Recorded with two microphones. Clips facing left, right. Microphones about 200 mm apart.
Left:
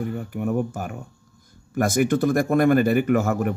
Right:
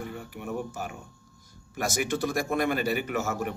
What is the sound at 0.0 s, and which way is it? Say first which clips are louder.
Speech: left 10 dB; 50° left (ahead or behind).